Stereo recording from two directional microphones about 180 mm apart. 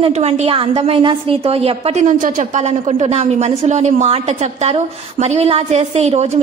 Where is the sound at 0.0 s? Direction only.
35° right (ahead or behind).